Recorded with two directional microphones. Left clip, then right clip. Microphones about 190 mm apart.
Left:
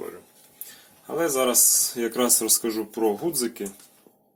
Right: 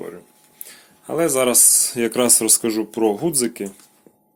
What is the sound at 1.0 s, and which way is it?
Speech, 50° right (ahead or behind).